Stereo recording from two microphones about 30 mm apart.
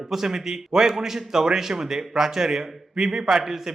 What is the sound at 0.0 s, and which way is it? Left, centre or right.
A man's voice, centre.